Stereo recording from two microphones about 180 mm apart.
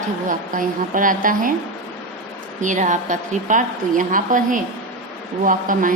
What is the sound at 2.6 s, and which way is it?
A woman's voice, 45° right (ahead or behind).